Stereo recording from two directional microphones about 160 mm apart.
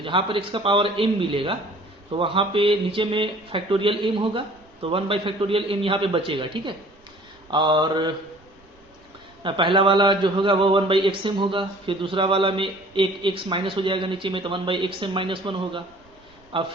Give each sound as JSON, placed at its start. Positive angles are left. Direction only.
{"t": 0.0, "sound": "a man's voice", "side_deg": -35}
{"t": 7.5, "sound": "mantra", "side_deg": -30}
{"t": 9.4, "sound": "a man's voice", "side_deg": -30}